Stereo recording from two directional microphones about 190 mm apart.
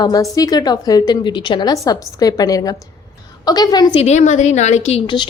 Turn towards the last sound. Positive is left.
turn(degrees=30)  # may be behind; listen again after turning